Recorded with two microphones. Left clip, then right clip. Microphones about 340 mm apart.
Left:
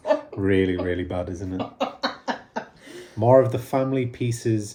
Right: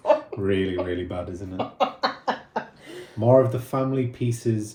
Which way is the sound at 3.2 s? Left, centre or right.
Left.